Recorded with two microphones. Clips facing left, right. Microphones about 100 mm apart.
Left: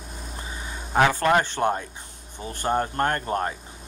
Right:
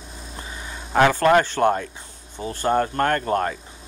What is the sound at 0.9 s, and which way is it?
Speech, 25° left (ahead or behind).